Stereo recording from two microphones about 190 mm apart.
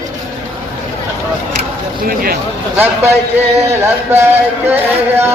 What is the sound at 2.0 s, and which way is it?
Speech, 50° right (ahead or behind).